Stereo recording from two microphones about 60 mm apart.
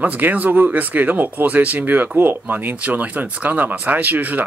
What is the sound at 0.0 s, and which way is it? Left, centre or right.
Speech, right.